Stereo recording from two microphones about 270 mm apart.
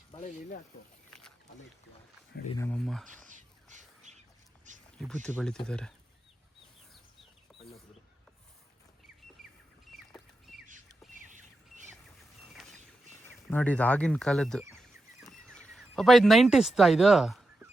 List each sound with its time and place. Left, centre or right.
0.1 s speech: left
1.1 s a sound: centre
2.5 s speech: centre
3.2 s a sound: right
4.9 s speech: centre
9.4 s bird: centre
11.1 s squawk: right
13.5 s speech: centre
14.8 s a sound: centre